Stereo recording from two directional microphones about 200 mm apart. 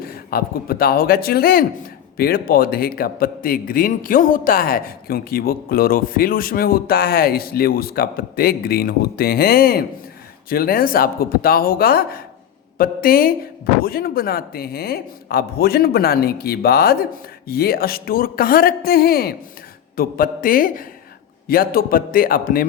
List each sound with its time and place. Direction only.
0.0 s speech: 50° left (ahead or behind)